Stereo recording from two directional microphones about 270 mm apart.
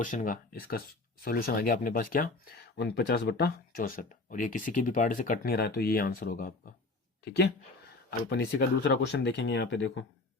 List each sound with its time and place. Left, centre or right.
0.0 s speech: left
8.3 s speech: left